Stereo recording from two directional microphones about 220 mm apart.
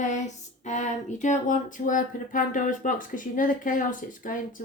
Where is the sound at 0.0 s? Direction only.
30° left (ahead or behind).